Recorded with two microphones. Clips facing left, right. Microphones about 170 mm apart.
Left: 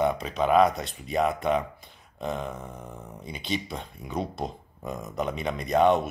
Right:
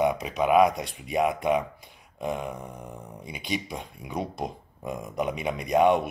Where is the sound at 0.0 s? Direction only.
15° right (ahead or behind).